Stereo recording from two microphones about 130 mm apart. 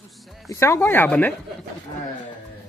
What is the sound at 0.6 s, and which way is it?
Speech, 20° left (ahead or behind).